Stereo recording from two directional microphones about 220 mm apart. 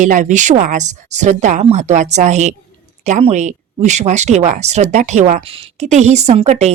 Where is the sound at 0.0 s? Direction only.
35° right (ahead or behind).